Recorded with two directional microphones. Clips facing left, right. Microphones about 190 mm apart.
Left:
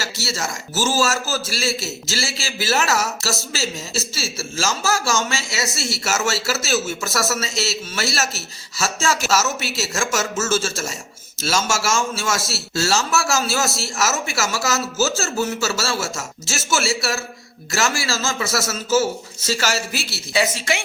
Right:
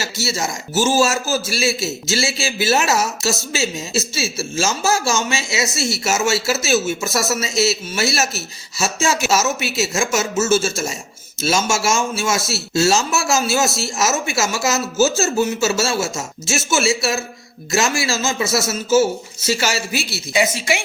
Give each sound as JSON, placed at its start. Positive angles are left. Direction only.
{"t": 0.0, "sound": "speech", "side_deg": -20}